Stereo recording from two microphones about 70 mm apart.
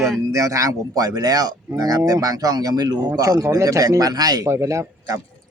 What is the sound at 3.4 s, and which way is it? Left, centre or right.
Speech, right.